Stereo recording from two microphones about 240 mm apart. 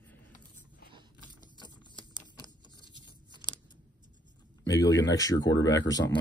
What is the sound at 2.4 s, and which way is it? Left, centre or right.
Tearing, centre.